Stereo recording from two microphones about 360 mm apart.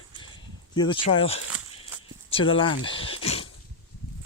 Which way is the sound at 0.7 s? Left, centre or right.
Centre.